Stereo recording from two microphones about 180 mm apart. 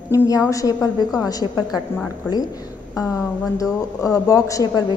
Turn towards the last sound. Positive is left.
turn(degrees=20)  # may be behind; listen again after turning